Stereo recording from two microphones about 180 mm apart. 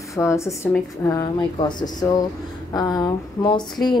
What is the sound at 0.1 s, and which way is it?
A woman's voice, 15° left (ahead or behind).